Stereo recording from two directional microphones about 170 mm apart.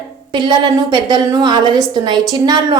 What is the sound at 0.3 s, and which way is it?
Speech, 25° right (ahead or behind).